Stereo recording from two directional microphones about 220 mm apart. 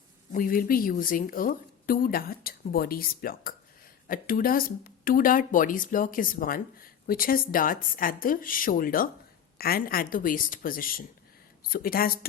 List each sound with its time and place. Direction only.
0.3 s speech: 40° left (ahead or behind)